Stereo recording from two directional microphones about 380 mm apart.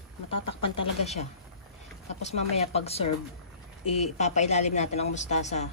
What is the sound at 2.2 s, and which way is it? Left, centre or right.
Speech, centre.